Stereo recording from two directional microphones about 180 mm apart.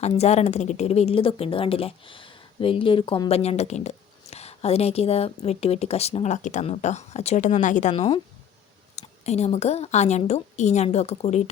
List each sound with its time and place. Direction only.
0.0 s a woman's voice: 35° left (ahead or behind)
7.9 s a woman's voice: 30° left (ahead or behind)